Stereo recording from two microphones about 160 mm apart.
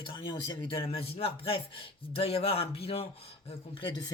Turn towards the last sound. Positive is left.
turn(degrees=25)  # may be behind; listen again after turning